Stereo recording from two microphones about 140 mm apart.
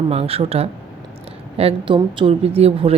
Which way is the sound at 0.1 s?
45° right (ahead or behind).